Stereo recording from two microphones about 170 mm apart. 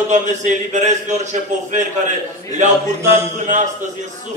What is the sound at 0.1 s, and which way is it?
A man's voice, 45° right (ahead or behind).